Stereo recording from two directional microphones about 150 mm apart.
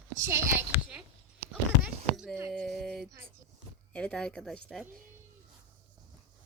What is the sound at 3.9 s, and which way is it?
Speech, 5° left (ahead or behind).